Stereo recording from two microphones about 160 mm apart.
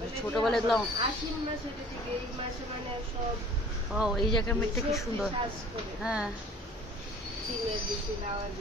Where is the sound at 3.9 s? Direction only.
5° right (ahead or behind).